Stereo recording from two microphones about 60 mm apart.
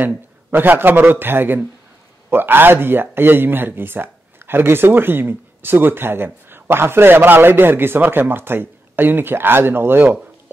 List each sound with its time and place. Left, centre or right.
0.5 s speech: right